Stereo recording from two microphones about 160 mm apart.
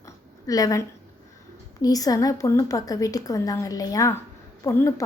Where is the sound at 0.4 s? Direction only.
20° left (ahead or behind).